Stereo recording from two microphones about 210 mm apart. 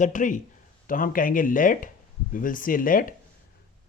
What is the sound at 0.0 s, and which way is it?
Speech, 35° left (ahead or behind).